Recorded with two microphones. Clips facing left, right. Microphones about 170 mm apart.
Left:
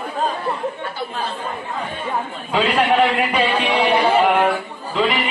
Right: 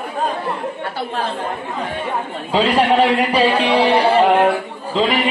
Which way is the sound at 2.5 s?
35° right (ahead or behind).